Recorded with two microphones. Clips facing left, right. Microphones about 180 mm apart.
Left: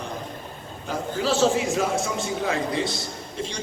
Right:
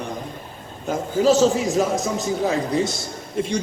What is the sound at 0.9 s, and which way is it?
A man's voice, 40° right (ahead or behind).